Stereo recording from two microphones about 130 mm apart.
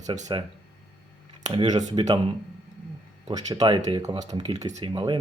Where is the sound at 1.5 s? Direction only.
30° right (ahead or behind).